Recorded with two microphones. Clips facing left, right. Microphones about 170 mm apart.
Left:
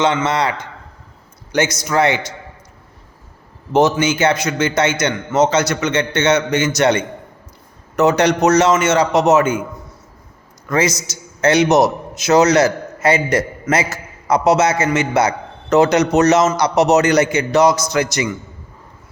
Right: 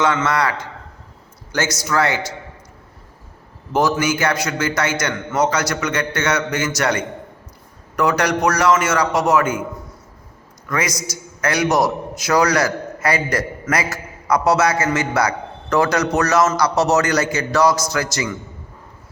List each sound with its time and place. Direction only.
0.0 s a man's voice: 20° left (ahead or behind)
3.7 s a man's voice: 20° left (ahead or behind)
10.7 s a man's voice: 25° left (ahead or behind)